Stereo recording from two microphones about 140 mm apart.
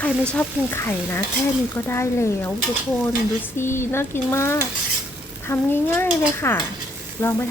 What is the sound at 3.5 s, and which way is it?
Stir, 15° left (ahead or behind).